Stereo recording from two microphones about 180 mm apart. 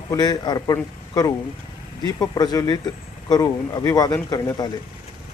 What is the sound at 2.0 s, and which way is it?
Speech, 20° left (ahead or behind).